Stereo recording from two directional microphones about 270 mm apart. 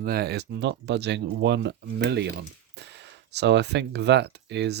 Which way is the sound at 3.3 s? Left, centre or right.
Right.